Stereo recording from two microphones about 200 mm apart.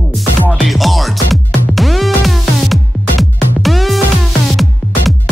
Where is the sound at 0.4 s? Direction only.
Centre (ahead or behind).